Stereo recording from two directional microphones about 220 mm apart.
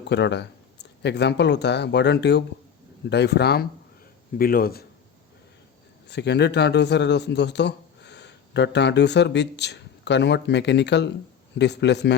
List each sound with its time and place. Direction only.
0.1 s speech: 50° left (ahead or behind)
6.1 s speech: 50° left (ahead or behind)